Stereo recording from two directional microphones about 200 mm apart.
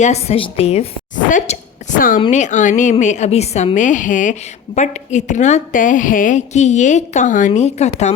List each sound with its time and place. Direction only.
0.0 s a woman's voice: 30° left (ahead or behind)
1.3 s a sound: 40° left (ahead or behind)
2.2 s a woman's voice: 35° left (ahead or behind)